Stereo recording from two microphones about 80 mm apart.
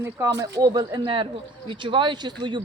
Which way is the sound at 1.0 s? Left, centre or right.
Right.